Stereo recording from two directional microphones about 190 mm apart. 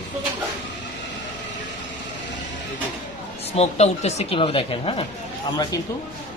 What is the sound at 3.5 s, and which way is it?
Speech, 35° left (ahead or behind).